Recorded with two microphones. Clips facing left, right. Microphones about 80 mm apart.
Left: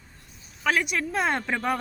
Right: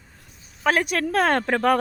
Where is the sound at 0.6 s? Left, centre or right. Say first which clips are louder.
Right 3 dB; right.